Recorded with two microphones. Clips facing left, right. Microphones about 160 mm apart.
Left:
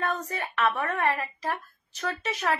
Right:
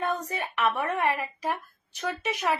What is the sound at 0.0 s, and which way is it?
A woman's voice, 15° right (ahead or behind).